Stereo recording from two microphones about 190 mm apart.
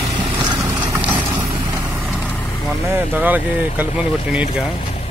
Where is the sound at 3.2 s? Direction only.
10° right (ahead or behind).